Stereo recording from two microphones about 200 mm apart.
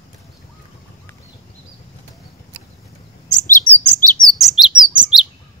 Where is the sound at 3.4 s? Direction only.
40° left (ahead or behind).